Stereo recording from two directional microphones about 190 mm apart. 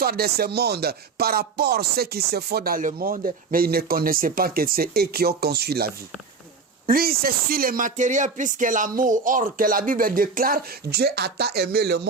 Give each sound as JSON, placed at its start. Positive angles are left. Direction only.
{"t": 0.0, "sound": "speech", "side_deg": -55}